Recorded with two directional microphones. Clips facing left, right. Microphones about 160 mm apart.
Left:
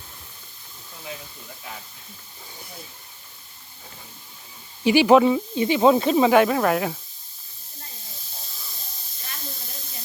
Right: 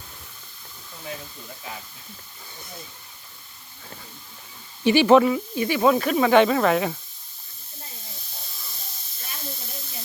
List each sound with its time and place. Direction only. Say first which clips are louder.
4.8 s speech: even; 10° left (ahead or behind)
6.3 s speech: right 1 dB; 5° left (ahead or behind)